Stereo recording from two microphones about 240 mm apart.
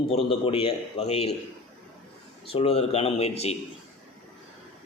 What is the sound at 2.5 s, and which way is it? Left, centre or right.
A man's voice, left.